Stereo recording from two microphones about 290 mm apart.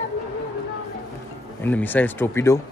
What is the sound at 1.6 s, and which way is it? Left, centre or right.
Speech, centre.